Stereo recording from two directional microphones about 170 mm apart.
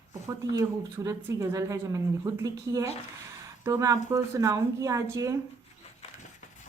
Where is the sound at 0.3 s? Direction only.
20° right (ahead or behind).